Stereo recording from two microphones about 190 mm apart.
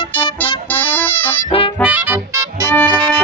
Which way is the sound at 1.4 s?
30° left (ahead or behind).